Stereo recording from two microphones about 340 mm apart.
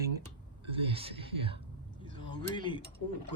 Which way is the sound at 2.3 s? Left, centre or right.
Centre.